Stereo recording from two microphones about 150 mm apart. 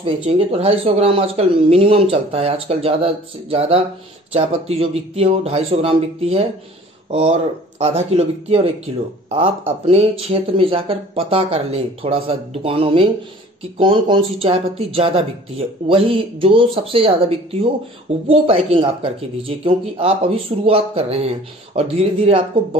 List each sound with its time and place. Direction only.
0.0 s speech: 35° right (ahead or behind)